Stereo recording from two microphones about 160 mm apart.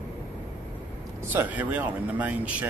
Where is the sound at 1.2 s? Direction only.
15° right (ahead or behind).